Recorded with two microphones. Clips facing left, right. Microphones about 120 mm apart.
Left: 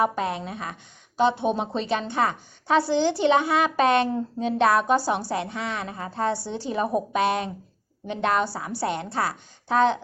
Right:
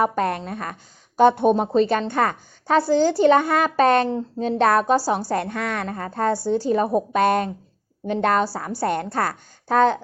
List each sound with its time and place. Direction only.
0.0 s a woman's voice: 55° right (ahead or behind); by 5.2 s 35° right (ahead or behind)
5.3 s a woman's voice: 50° right (ahead or behind); by 7.2 s 35° right (ahead or behind)
7.2 s a woman's voice: 45° right (ahead or behind)